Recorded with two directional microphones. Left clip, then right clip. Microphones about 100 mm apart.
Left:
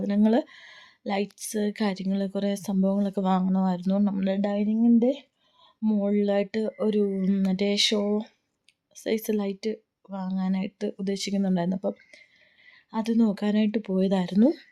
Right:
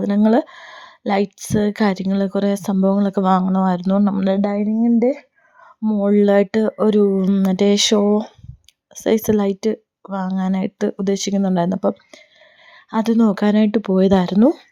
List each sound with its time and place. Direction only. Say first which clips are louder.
0.3 s speech: right 8 dB; 55° right (ahead or behind)
2.0 s speech: right 9 dB; 55° right (ahead or behind)
5.8 s speech: right 8 dB; 50° right (ahead or behind)
6.1 s speech: right 13 dB; 90° right; by 14.3 s 70° right (ahead or behind)
14.3 s speech: right 8 dB; 35° right (ahead or behind)